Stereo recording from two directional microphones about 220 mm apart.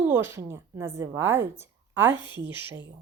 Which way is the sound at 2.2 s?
20° left (ahead or behind).